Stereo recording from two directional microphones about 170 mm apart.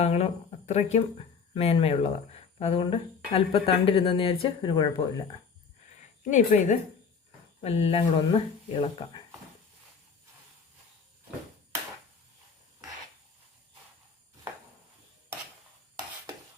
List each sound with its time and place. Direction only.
0.0 s speech: 40° left (ahead or behind)
6.3 s speech: 45° left (ahead or behind)
7.6 s speech: 35° left (ahead or behind)